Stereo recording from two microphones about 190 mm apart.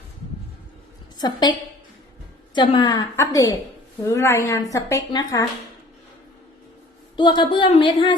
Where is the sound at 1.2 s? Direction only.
20° left (ahead or behind).